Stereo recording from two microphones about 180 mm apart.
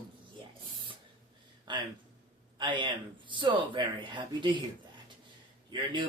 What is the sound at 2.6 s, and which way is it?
Speech, 25° right (ahead or behind).